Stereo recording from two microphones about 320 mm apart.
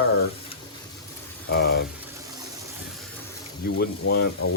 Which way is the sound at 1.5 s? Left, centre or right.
Left.